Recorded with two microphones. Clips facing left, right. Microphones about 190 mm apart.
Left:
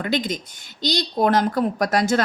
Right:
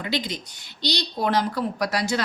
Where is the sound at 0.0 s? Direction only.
50° left (ahead or behind).